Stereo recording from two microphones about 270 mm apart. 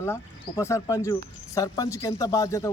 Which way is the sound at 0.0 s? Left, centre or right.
Centre.